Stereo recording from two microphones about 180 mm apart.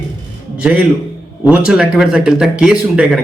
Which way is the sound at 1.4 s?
5° right (ahead or behind).